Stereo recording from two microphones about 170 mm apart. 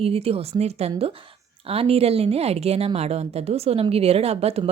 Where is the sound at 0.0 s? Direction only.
35° right (ahead or behind).